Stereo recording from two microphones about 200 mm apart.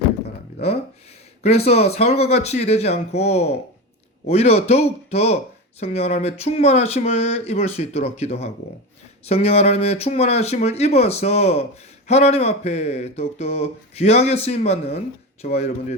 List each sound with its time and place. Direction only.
1.4 s speech: 30° left (ahead or behind)